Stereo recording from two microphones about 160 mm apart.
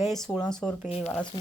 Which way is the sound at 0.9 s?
40° left (ahead or behind).